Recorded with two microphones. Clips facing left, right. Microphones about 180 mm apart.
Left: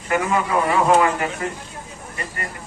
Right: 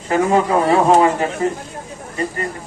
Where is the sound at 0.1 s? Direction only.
30° right (ahead or behind).